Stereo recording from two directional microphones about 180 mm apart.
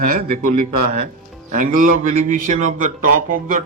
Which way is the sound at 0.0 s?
50° right (ahead or behind).